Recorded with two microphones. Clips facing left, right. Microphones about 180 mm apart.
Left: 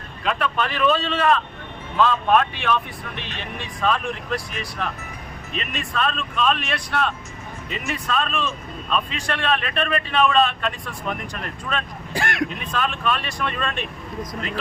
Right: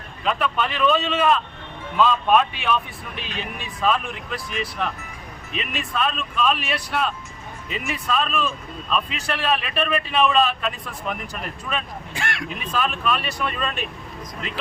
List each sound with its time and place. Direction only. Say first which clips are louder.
0.3 s speech: even; 5° right (ahead or behind)
3.8 s speech: even; centre (ahead or behind)
12.1 s speech: left 6 dB; 40° left (ahead or behind)
12.7 s speech: right 5 dB; 5° right (ahead or behind)